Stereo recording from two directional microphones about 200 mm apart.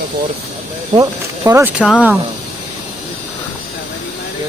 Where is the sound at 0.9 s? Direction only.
15° right (ahead or behind).